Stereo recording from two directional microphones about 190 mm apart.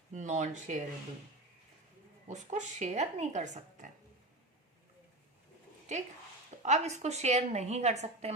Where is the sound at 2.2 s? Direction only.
40° right (ahead or behind).